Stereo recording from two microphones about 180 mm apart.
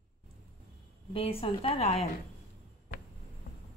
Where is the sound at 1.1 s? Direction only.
30° left (ahead or behind).